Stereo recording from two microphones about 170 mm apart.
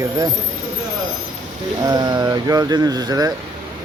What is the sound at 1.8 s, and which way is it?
Speech, 25° right (ahead or behind).